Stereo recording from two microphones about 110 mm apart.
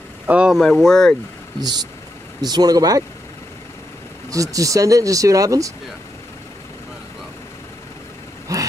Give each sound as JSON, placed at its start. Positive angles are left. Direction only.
{"t": 0.3, "sound": "speech", "side_deg": -5}
{"t": 1.6, "sound": "speech", "side_deg": -35}
{"t": 4.3, "sound": "speech", "side_deg": -30}
{"t": 8.5, "sound": "a sound", "side_deg": -30}